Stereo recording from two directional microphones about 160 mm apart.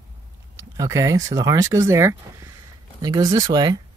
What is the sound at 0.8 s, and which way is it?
Speech, 20° right (ahead or behind).